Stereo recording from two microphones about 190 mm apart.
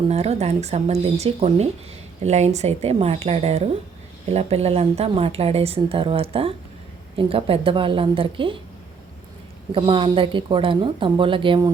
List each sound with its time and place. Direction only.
0.1 s a woman's voice: 35° right (ahead or behind)
9.7 s a woman's voice: 25° right (ahead or behind)